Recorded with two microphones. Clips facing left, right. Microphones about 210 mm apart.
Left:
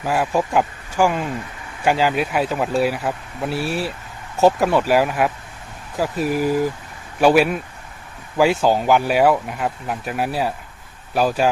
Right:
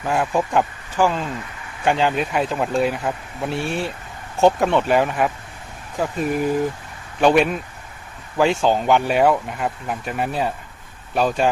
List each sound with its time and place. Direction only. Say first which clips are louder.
0.0 s speech: left 1 dB; 5° left (ahead or behind)